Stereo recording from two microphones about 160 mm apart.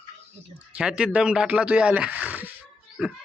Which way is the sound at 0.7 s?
5° right (ahead or behind).